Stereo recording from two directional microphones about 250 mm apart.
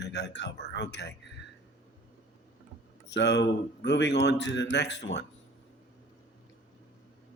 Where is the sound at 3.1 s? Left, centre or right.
Left.